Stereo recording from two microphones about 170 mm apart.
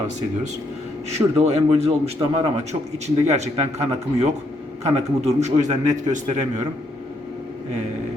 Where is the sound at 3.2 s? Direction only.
40° right (ahead or behind).